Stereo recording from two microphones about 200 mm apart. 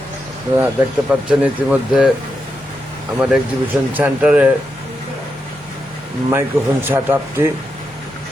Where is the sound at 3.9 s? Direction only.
10° right (ahead or behind).